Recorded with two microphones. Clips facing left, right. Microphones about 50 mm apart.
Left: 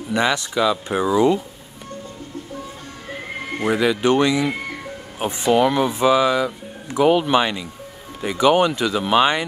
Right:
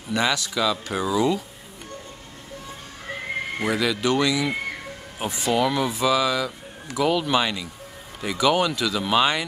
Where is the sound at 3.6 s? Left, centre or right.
Left.